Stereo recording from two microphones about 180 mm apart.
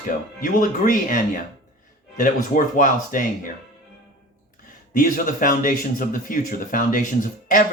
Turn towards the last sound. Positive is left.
turn(degrees=50)  # may be behind; listen again after turning